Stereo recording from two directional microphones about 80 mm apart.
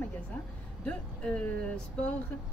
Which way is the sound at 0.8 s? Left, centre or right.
Centre.